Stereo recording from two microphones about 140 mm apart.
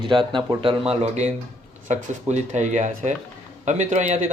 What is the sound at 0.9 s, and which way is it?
Speech, 55° right (ahead or behind).